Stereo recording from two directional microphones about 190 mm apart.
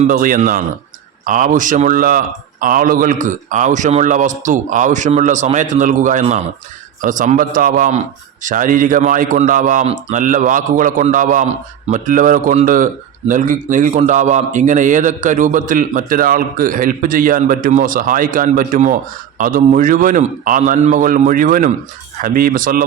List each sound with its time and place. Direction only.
0.0 s a man's voice: 45° right (ahead or behind)